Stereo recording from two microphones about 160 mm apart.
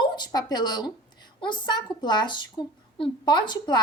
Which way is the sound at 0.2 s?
25° left (ahead or behind).